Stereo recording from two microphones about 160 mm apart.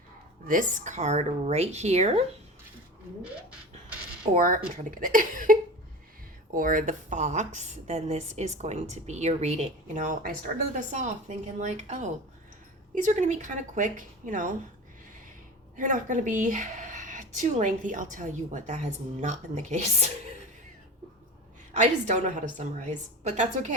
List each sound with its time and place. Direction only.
0.4 s a woman's voice: 55° right (ahead or behind)
4.4 s a woman's voice: 55° right (ahead or behind)
15.7 s a woman's voice: 50° right (ahead or behind)
21.7 s a woman's voice: 50° right (ahead or behind)